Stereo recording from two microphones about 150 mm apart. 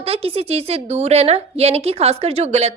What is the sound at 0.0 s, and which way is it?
A woman's voice, 40° right (ahead or behind).